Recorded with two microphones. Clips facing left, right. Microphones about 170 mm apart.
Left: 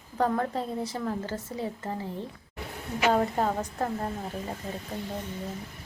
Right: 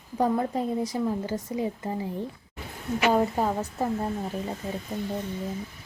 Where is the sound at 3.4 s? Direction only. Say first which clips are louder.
Right 1 dB; 5° right (ahead or behind).